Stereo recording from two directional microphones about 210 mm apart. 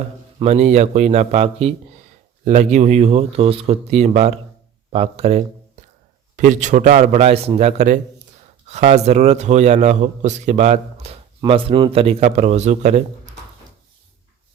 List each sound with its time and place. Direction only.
0.3 s a man's voice: 30° right (ahead or behind)